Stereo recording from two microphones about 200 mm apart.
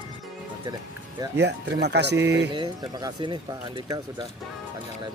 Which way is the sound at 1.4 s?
60° right (ahead or behind).